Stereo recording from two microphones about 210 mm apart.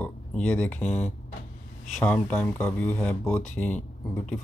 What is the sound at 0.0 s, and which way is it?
Speech, 5° left (ahead or behind).